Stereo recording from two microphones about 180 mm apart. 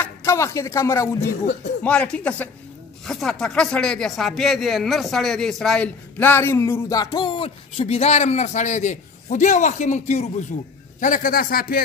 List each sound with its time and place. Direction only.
0.0 s speech: 15° left (ahead or behind)
1.2 s speech: 70° left (ahead or behind)
1.8 s a man's voice: 5° left (ahead or behind); by 11.8 s 55° left (ahead or behind)